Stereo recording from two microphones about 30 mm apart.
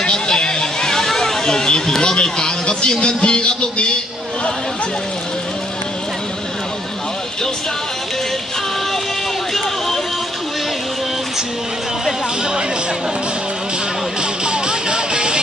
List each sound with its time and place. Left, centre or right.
0.0 s a sound: left
2.2 s speech: left
14.2 s music: right